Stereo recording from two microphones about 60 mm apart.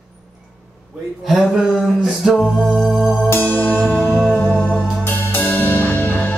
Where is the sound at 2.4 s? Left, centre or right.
Centre.